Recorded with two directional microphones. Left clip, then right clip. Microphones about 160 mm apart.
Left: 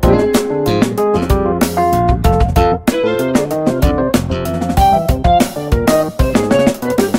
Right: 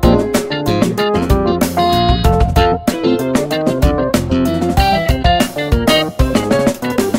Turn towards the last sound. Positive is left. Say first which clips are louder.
# left 1 dB
turn(degrees=0)  # may be behind; listen again after turning